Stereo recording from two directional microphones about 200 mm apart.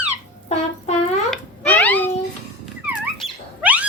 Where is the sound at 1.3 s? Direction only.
10° left (ahead or behind).